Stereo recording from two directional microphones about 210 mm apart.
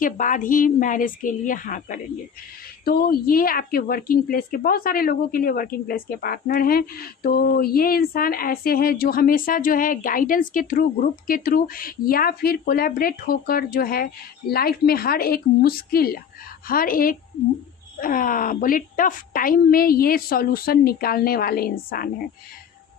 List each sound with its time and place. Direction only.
0.0 s a woman's voice: 40° left (ahead or behind)